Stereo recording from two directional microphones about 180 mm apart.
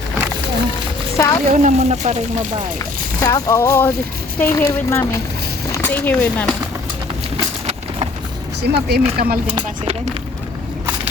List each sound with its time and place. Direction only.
1.1 s a sound: 15° left (ahead or behind)
1.6 s speech: 40° right (ahead or behind)
3.2 s a sound: 20° left (ahead or behind)
5.7 s speech: 10° left (ahead or behind)
8.6 s speech: 65° right (ahead or behind)
9.5 s speech: 30° right (ahead or behind)